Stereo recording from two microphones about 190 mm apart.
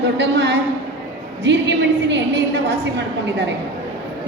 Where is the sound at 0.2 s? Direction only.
65° right (ahead or behind).